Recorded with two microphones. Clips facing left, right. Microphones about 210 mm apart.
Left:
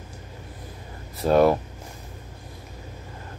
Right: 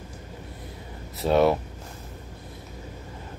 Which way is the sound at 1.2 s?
Centre (ahead or behind).